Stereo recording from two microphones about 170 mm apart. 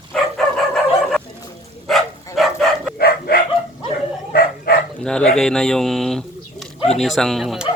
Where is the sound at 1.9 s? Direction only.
Centre (ahead or behind).